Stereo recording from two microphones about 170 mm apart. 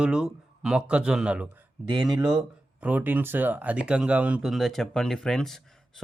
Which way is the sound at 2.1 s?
25° right (ahead or behind).